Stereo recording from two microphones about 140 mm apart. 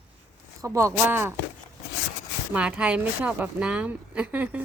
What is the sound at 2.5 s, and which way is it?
A woman's voice, 10° right (ahead or behind).